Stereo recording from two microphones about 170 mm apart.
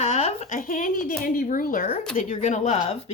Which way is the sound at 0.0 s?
40° left (ahead or behind).